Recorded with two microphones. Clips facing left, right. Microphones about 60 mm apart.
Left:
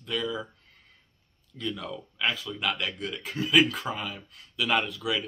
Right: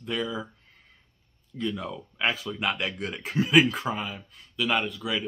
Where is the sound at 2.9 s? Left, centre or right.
Right.